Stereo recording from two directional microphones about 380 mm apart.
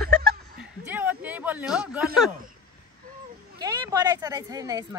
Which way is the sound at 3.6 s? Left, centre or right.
Centre.